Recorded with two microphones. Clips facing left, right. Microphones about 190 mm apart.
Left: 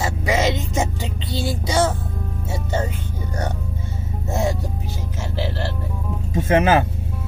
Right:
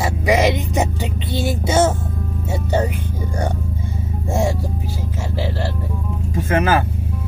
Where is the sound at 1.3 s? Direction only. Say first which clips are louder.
Right 3 dB; 20° right (ahead or behind).